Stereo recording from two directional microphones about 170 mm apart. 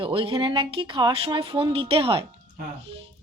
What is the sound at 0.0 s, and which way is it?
Speech, 30° right (ahead or behind).